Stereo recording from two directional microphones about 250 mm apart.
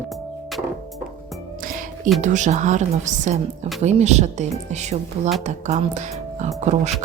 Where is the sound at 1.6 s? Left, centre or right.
Right.